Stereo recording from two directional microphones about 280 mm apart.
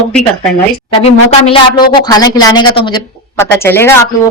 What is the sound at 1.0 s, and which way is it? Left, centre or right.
A woman's voice, centre.